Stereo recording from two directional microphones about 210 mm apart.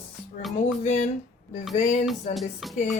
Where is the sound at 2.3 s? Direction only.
Centre (ahead or behind).